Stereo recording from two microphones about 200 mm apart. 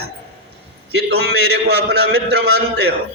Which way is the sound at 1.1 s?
55° right (ahead or behind).